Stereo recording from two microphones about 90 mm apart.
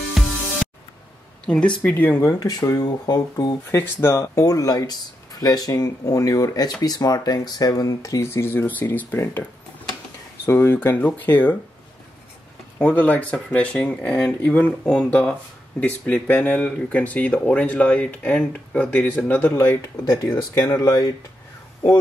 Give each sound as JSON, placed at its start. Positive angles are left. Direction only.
{"t": 0.2, "sound": "music", "side_deg": 0}
{"t": 1.4, "sound": "speech", "side_deg": 10}
{"t": 2.2, "sound": "speech", "side_deg": 40}
{"t": 3.7, "sound": "speech", "side_deg": 25}
{"t": 8.2, "sound": "speech", "side_deg": 30}
{"t": 10.4, "sound": "speech", "side_deg": 30}
{"t": 12.7, "sound": "speech", "side_deg": 15}
{"t": 19.5, "sound": "speech", "side_deg": 30}
{"t": 20.6, "sound": "speech", "side_deg": 40}